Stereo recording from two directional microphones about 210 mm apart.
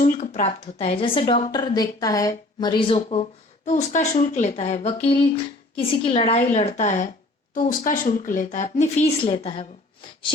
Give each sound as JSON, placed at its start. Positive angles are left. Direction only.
{"t": 0.0, "sound": "a woman's voice", "side_deg": 35}